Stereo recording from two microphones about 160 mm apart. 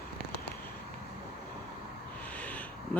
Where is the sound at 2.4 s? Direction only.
10° left (ahead or behind).